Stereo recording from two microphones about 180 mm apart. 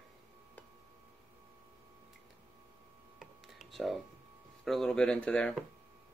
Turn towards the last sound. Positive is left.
turn(degrees=5)  # may be behind; listen again after turning